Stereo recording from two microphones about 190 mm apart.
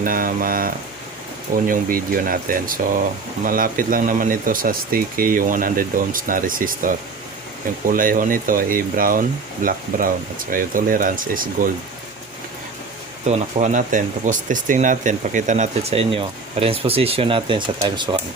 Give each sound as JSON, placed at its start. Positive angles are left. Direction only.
{"t": 0.0, "sound": "speech", "side_deg": -45}
{"t": 13.2, "sound": "speech", "side_deg": -35}